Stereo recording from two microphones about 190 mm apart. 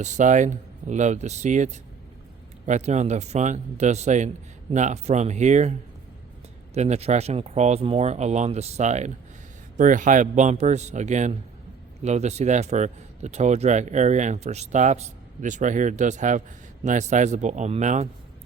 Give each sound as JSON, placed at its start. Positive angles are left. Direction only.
{"t": 0.0, "sound": "speech", "side_deg": -40}
{"t": 6.7, "sound": "speech", "side_deg": -35}